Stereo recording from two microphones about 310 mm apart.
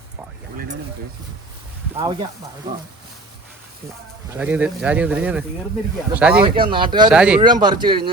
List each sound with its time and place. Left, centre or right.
2.0 s speech: centre
4.3 s speech: centre
6.4 s speech: centre
7.1 s speech: centre
7.4 s speech: centre